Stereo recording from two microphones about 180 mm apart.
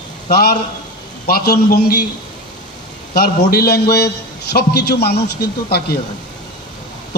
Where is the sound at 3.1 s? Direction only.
60° left (ahead or behind).